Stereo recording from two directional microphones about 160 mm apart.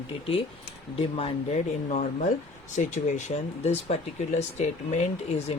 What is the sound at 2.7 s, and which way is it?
Speech, 50° left (ahead or behind).